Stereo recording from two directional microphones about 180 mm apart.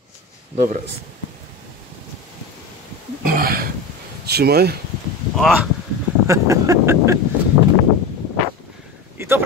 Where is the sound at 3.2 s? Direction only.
55° right (ahead or behind).